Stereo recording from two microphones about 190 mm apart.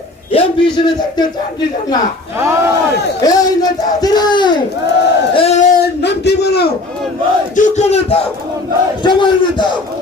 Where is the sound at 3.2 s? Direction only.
20° left (ahead or behind).